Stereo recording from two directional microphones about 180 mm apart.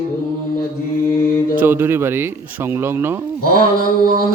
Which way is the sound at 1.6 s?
10° right (ahead or behind).